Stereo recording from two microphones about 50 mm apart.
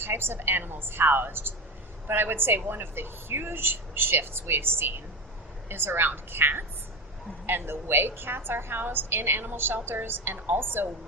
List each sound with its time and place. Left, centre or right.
0.0 s a woman's voice: right